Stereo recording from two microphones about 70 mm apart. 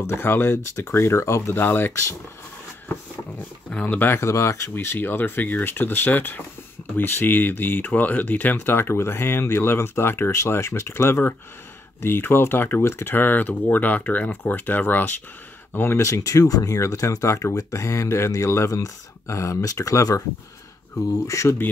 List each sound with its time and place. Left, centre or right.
0.0 s speech: left
3.7 s speech: centre
4.0 s speech: left
4.7 s speech: left
17.8 s speech: left
21.3 s speech: left